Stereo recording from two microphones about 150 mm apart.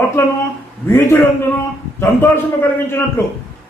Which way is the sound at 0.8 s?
15° left (ahead or behind).